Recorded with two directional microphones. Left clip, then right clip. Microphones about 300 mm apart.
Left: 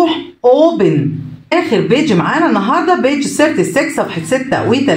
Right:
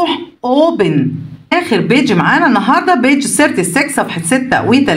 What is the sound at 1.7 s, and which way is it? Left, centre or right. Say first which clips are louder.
A woman's voice: right 1 dB; right.